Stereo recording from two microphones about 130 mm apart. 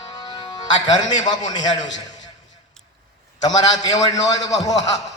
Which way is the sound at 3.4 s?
30° left (ahead or behind).